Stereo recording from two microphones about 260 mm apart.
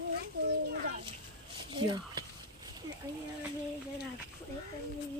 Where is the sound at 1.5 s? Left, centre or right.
Centre.